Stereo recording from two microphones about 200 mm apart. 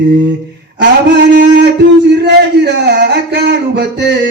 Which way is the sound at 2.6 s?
55° right (ahead or behind).